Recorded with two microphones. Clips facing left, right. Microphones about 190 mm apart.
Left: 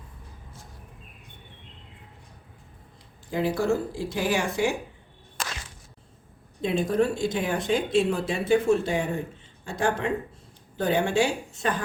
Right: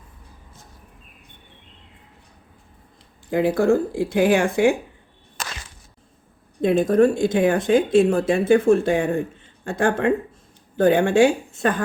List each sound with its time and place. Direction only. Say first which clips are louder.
3.2 s speech: right 7 dB; 55° right (ahead or behind)
6.6 s speech: right 8 dB; 50° right (ahead or behind)